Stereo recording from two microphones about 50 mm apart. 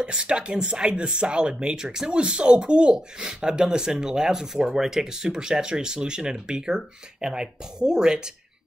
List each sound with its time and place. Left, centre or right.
0.0 s speech: centre